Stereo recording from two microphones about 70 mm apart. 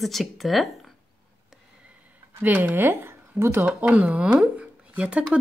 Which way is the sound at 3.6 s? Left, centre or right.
Centre.